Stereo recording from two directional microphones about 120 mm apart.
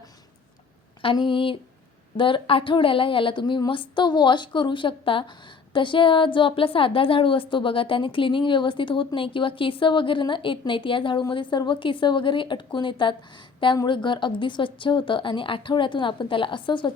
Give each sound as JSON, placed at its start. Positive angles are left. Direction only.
{"t": 1.0, "sound": "a woman's voice", "side_deg": 45}